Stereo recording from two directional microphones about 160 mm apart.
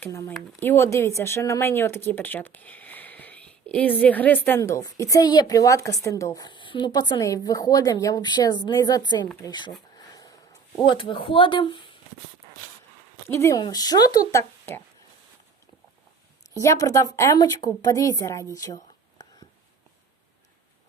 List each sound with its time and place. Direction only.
0.0 s speech: 15° left (ahead or behind)
10.2 s a sound: 25° left (ahead or behind)
13.2 s speech: 15° left (ahead or behind)
16.6 s speech: 20° left (ahead or behind)